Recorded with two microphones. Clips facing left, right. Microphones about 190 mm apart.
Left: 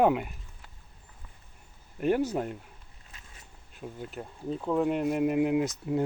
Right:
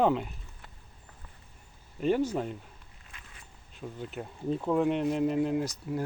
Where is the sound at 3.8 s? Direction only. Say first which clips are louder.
Right 1 dB; centre (ahead or behind); by 6.0 s 20° left (ahead or behind).